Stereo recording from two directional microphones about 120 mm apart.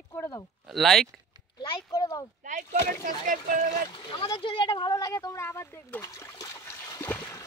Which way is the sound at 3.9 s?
45° left (ahead or behind).